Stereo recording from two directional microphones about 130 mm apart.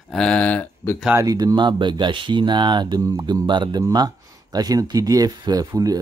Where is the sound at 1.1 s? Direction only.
30° right (ahead or behind).